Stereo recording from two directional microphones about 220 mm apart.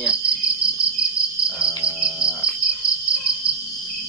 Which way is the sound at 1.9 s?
5° right (ahead or behind).